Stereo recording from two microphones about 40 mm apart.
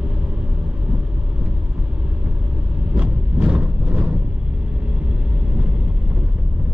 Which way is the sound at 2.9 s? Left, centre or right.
Right.